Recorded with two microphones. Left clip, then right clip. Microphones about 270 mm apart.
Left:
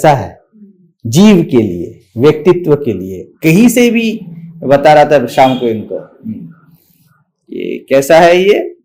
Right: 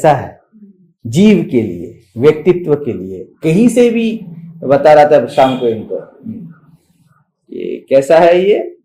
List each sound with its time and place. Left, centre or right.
0.0 s a man's voice: left
7.5 s a man's voice: left